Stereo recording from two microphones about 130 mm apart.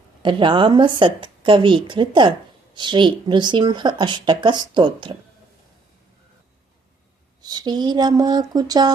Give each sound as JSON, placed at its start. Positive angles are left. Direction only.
{"t": 0.2, "sound": "a woman's voice", "side_deg": -40}
{"t": 7.4, "sound": "a woman's voice", "side_deg": -30}